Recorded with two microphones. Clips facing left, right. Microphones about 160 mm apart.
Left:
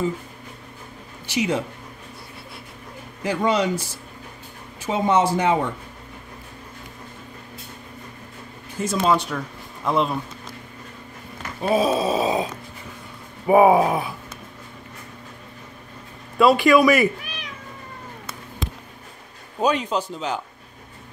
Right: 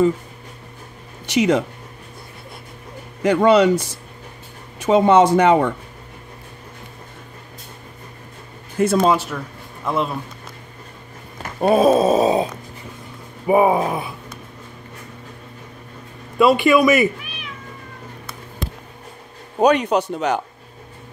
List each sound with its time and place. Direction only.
1.3 s speech: 65° right (ahead or behind)
3.3 s speech: 65° right (ahead or behind)
8.7 s speech: 60° right (ahead or behind)
9.1 s a man's voice: 5° right (ahead or behind)
11.6 s groan: 55° right (ahead or behind)
13.5 s a man's voice: 5° left (ahead or behind)
16.3 s a man's voice: centre (ahead or behind)
17.2 s cat: 40° left (ahead or behind)
19.6 s speech: 70° right (ahead or behind)